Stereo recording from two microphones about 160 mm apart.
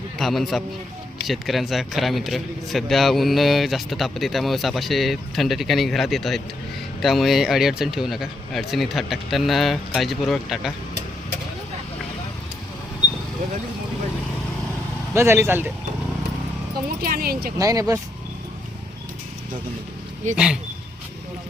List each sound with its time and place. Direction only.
0.2 s a man's voice: centre (ahead or behind)
15.1 s speech: 15° right (ahead or behind)
17.0 s speech: 70° right (ahead or behind)
17.6 s speech: 20° right (ahead or behind)
20.3 s a man's voice: 5° right (ahead or behind)